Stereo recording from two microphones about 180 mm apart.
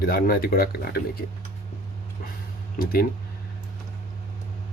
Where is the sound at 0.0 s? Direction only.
55° left (ahead or behind).